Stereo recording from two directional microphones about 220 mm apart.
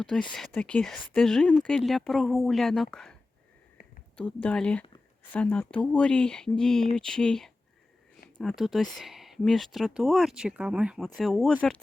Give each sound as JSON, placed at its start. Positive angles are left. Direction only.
{"t": 0.3, "sound": "speech", "side_deg": 5}
{"t": 4.2, "sound": "speech", "side_deg": 5}